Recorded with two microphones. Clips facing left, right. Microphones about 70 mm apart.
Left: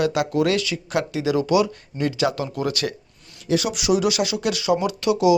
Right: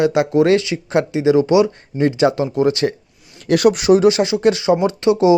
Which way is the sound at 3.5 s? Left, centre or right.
Right.